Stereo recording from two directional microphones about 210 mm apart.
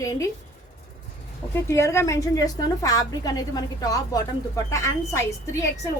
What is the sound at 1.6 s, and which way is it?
A woman's voice, 15° left (ahead or behind).